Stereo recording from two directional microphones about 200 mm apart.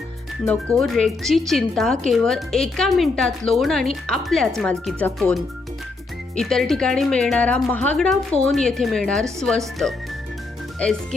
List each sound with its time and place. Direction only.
0.4 s speech: 5° left (ahead or behind)